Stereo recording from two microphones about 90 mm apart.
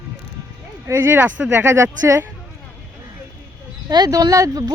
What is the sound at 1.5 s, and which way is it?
Speech, 30° right (ahead or behind).